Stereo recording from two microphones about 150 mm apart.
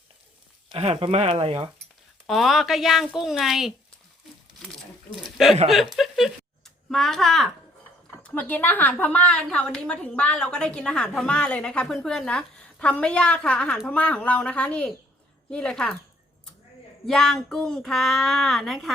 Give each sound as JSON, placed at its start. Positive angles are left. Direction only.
{"t": 0.7, "sound": "speech", "side_deg": -35}
{"t": 2.2, "sound": "speech", "side_deg": 0}
{"t": 4.7, "sound": "a sound", "side_deg": 0}
{"t": 5.6, "sound": "a woman's voice", "side_deg": 0}
{"t": 17.1, "sound": "speech", "side_deg": 5}